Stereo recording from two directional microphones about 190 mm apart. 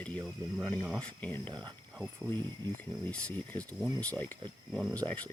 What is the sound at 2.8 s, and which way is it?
Speech, 10° left (ahead or behind).